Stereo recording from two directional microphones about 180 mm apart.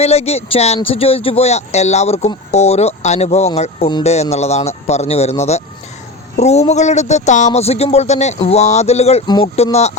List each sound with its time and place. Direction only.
0.0 s speech: 35° left (ahead or behind)
9.2 s speech: 25° left (ahead or behind)
9.7 s speech: 35° left (ahead or behind)